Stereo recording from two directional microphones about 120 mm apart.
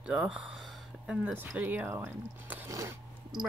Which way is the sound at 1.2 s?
15° right (ahead or behind).